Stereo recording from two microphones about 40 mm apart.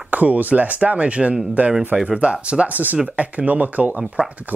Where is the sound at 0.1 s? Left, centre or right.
Right.